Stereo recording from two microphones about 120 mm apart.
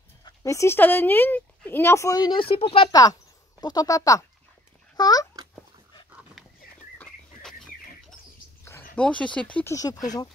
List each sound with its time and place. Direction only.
0.2 s speech: 30° left (ahead or behind); by 2.9 s 50° left (ahead or behind)
2.9 s a child's voice: 30° left (ahead or behind)
7.0 s a sound: 5° left (ahead or behind)
8.6 s a sound: 20° left (ahead or behind)
9.0 s speech: 10° left (ahead or behind)
9.7 s speech: 30° left (ahead or behind)